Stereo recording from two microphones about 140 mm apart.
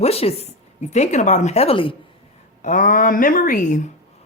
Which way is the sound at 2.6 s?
70° left (ahead or behind).